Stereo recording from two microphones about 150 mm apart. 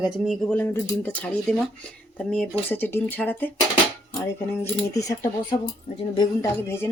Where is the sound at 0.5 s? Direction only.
15° left (ahead or behind).